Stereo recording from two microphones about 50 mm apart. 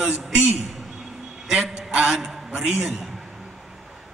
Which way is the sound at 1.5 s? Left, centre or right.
Centre.